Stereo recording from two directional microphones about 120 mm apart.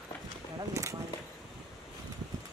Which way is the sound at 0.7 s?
25° right (ahead or behind).